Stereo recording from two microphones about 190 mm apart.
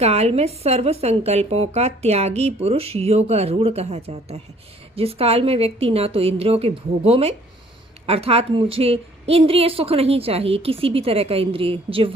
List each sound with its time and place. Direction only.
0.0 s speech: 35° right (ahead or behind)